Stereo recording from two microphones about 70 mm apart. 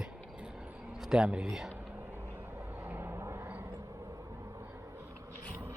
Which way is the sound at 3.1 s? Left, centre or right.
Right.